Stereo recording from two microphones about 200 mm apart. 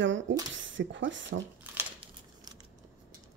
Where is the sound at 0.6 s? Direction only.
70° right (ahead or behind).